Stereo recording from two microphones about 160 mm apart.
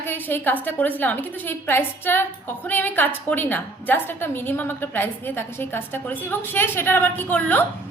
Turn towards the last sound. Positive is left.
turn(degrees=10)  # may be behind; listen again after turning